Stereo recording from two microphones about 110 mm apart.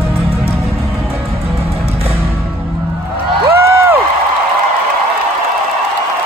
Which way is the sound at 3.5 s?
20° right (ahead or behind).